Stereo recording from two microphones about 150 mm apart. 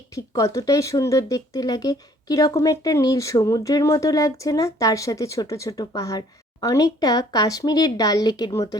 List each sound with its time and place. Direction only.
0.3 s speech: 20° left (ahead or behind)